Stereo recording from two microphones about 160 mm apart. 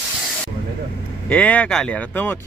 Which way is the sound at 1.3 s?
10° left (ahead or behind).